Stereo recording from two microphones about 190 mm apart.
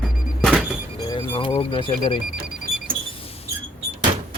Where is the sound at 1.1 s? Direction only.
25° left (ahead or behind).